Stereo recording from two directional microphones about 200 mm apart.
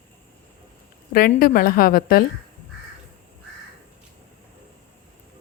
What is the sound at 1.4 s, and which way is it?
Speech, 45° left (ahead or behind).